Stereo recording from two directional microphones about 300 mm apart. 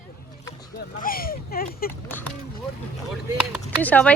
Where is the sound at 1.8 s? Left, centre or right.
Centre.